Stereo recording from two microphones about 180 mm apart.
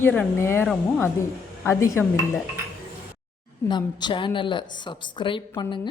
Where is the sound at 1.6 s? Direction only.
15° left (ahead or behind).